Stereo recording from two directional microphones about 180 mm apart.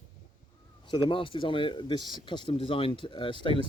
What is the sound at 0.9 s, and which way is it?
Speech, 25° left (ahead or behind).